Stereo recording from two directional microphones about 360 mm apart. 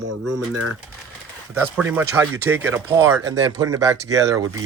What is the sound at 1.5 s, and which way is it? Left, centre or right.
Speech, centre.